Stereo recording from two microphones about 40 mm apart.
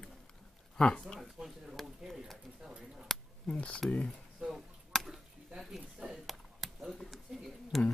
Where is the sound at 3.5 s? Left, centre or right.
Left.